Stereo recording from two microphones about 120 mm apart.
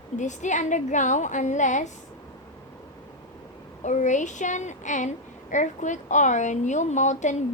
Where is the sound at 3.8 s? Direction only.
90° left.